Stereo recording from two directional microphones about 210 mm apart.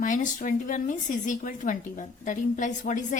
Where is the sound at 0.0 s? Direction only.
35° left (ahead or behind).